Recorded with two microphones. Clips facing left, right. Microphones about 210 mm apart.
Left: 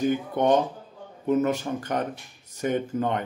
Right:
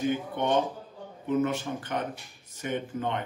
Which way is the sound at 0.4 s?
40° left (ahead or behind).